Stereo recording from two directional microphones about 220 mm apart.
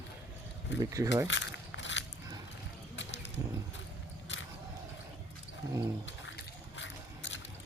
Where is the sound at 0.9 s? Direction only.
15° right (ahead or behind).